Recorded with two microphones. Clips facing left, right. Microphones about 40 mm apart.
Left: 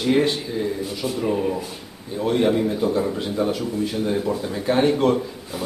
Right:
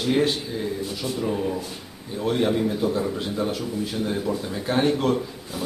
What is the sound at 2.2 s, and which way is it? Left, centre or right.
A man's voice, centre.